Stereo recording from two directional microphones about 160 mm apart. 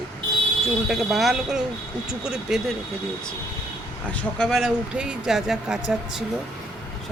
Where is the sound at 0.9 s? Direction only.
Centre (ahead or behind).